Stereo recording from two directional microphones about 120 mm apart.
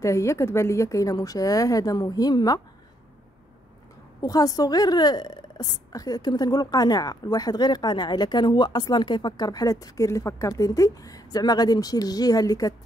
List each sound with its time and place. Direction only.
0.0 s a woman's voice: 25° left (ahead or behind)
4.2 s a woman's voice: 30° left (ahead or behind)